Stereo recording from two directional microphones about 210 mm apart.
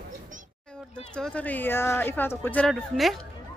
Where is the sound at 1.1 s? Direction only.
5° left (ahead or behind).